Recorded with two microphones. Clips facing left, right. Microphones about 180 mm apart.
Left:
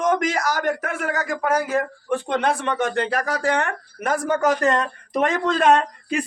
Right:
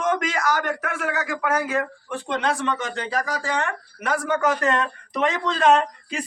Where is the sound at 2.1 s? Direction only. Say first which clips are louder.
Left 4 dB; 55° left (ahead or behind).